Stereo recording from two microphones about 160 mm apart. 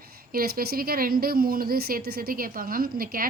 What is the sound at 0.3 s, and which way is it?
A woman's voice, 65° right (ahead or behind).